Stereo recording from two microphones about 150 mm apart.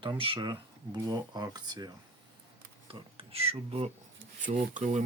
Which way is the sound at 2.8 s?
40° right (ahead or behind).